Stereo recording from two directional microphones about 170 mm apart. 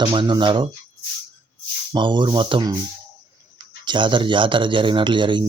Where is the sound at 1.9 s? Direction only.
25° right (ahead or behind).